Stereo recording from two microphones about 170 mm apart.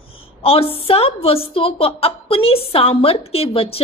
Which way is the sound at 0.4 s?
35° left (ahead or behind).